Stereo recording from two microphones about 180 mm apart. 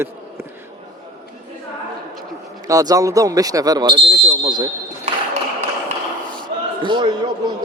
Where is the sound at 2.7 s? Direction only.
20° right (ahead or behind).